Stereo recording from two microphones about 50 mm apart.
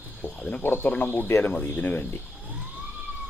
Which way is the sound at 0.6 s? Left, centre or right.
Left.